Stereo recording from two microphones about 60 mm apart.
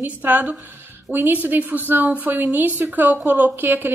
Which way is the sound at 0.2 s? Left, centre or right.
Right.